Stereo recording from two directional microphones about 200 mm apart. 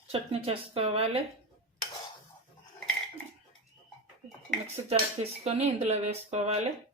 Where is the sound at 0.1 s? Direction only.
30° right (ahead or behind).